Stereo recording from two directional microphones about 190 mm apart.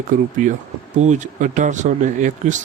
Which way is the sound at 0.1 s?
45° right (ahead or behind).